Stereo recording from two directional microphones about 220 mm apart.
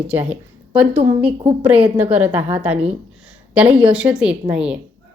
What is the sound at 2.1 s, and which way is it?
Speech, 10° right (ahead or behind).